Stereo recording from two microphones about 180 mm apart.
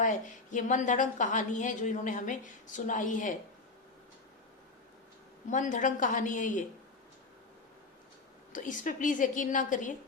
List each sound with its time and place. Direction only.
0.0 s a woman's voice: 45° left (ahead or behind)
5.5 s a woman's voice: 45° left (ahead or behind)
8.5 s a woman's voice: 45° left (ahead or behind)